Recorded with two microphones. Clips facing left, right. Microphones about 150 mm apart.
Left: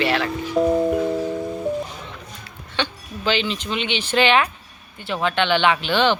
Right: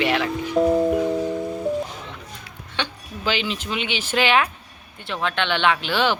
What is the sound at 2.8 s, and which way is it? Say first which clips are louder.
Speech: left 3 dB; 10° right (ahead or behind).